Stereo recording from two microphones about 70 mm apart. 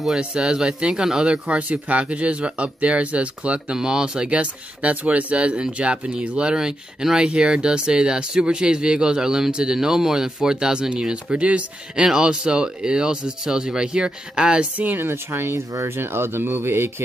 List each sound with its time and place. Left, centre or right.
0.2 s speech: centre
15.0 s speech: right